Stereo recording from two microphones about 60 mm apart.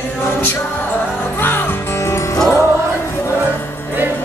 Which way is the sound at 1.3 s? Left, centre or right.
Left.